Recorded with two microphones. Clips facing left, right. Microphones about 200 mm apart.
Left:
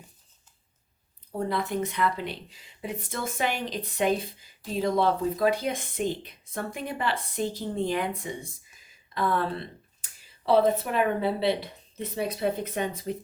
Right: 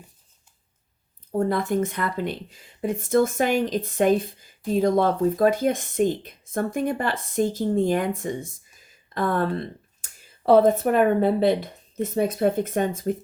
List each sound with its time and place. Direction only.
1.4 s speech: 45° right (ahead or behind)